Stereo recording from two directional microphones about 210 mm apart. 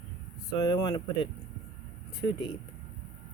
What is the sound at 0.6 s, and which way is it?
Speech, 15° left (ahead or behind).